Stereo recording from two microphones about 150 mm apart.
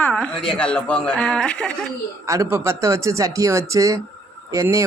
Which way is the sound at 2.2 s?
20° right (ahead or behind).